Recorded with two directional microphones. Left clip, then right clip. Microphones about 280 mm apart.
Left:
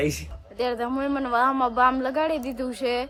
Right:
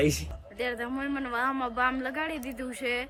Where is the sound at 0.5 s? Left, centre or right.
Centre.